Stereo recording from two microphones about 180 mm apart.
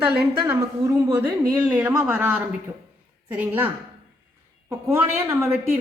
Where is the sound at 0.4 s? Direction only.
15° right (ahead or behind).